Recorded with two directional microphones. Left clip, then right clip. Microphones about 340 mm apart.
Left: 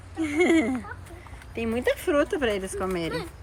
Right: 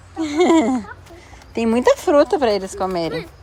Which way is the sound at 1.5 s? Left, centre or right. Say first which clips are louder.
Right 10 dB; centre.